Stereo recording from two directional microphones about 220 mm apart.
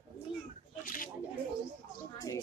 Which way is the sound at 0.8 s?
40° left (ahead or behind).